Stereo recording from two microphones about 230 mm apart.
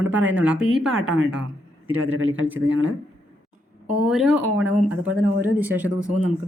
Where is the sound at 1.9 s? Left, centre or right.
Right.